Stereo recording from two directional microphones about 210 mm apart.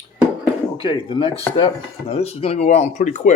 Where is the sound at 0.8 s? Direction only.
25° left (ahead or behind).